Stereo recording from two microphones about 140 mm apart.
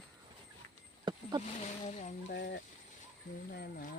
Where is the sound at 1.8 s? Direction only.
60° left (ahead or behind).